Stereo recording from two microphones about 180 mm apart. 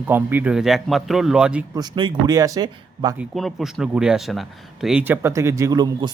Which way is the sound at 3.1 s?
Centre (ahead or behind).